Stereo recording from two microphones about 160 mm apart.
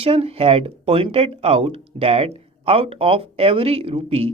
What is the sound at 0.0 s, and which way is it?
Speech, 35° right (ahead or behind).